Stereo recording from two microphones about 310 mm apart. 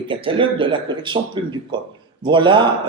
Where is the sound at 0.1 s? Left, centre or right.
Centre.